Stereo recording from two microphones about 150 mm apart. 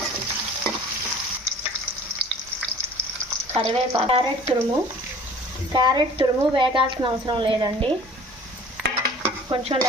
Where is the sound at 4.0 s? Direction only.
40° right (ahead or behind).